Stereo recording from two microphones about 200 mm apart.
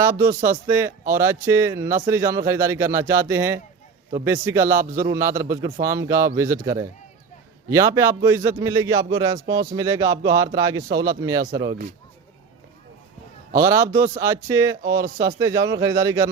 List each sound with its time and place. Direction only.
0.0 s speech: 15° right (ahead or behind)
13.6 s speech: 15° right (ahead or behind)